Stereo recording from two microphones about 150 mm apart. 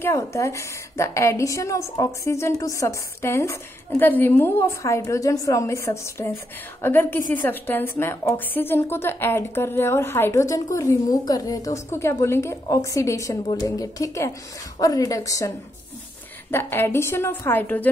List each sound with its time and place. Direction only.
0.0 s a woman's voice: 20° left (ahead or behind)